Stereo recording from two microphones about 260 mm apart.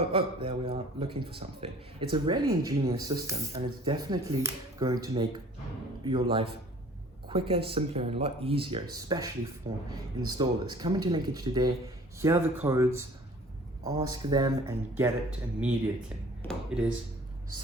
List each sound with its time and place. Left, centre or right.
0.1 s speech: centre